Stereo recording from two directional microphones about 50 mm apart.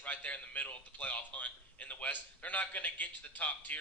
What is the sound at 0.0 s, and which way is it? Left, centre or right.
A man's voice, left.